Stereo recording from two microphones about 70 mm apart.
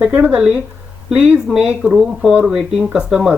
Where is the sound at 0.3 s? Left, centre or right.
Centre.